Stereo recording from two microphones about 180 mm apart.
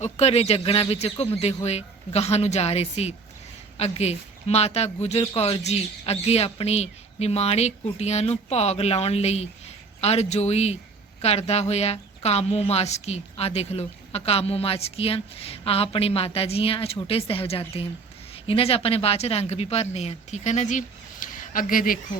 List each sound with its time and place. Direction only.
0.0 s a woman's voice: 35° left (ahead or behind)